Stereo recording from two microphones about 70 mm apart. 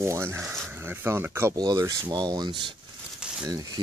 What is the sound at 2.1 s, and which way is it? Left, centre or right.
Speech, right.